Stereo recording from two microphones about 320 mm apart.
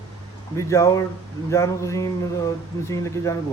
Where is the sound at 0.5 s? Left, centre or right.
Centre.